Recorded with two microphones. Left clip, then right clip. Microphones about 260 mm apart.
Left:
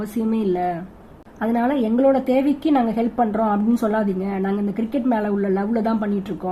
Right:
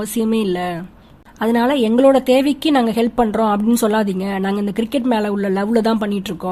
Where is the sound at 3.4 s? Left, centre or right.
Right.